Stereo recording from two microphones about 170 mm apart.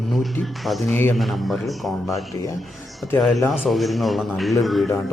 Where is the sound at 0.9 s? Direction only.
15° left (ahead or behind).